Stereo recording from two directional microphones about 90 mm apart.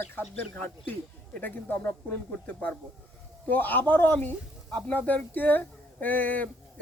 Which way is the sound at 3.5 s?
20° left (ahead or behind).